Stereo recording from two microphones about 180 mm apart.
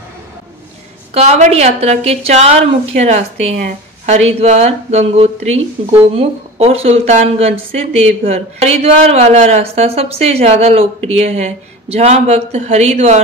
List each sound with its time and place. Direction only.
1.1 s a man's voice: 35° right (ahead or behind)